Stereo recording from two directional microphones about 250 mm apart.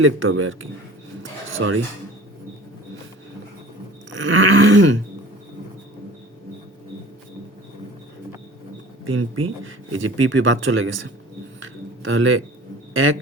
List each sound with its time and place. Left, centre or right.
0.0 s speech: right
1.2 s a sound: right
4.3 s speech: right
9.0 s speech: right
11.6 s a sound: right
12.9 s speech: right